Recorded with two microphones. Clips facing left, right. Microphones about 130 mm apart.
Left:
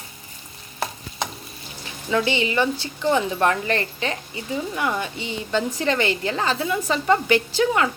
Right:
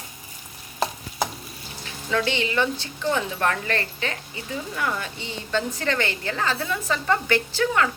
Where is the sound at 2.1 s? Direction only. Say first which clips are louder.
Left 3 dB; 15° left (ahead or behind).